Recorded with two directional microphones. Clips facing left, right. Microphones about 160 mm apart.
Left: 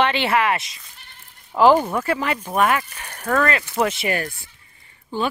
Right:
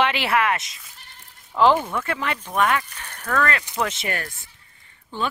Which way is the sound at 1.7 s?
40° left (ahead or behind).